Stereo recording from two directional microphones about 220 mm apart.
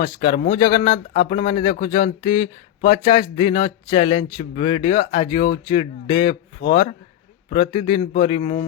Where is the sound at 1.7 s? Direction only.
40° left (ahead or behind).